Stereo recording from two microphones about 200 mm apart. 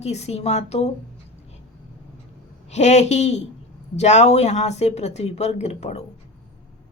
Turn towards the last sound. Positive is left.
turn(degrees=35)  # may be behind; listen again after turning